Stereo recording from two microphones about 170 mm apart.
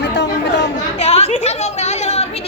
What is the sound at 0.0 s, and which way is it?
Chatter, 90° left.